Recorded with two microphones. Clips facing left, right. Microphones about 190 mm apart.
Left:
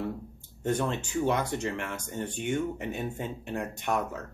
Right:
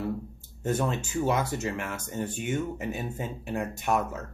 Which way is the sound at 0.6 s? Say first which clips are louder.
Right 1 dB; 5° right (ahead or behind).